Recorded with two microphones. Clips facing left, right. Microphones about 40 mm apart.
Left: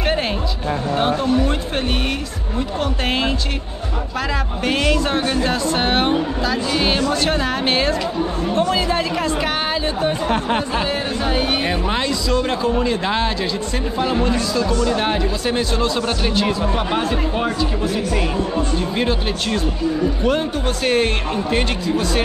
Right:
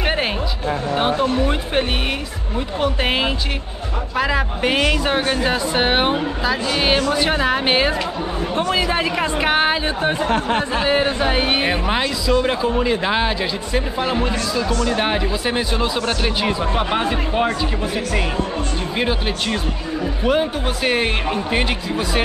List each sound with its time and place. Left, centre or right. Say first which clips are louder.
0.9 s speech: left 1 dB; centre
10.5 s speech: even; centre
10.9 s speech: right 4 dB; right